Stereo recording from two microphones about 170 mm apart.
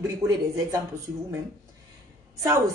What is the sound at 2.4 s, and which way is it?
Speech, 20° right (ahead or behind).